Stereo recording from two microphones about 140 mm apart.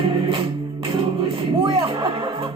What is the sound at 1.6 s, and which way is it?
Music, 40° right (ahead or behind).